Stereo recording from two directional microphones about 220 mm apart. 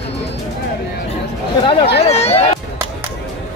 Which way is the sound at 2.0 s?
30° left (ahead or behind).